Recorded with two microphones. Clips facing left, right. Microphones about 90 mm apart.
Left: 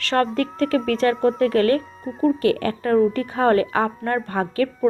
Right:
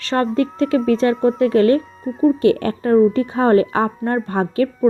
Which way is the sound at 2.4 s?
30° right (ahead or behind).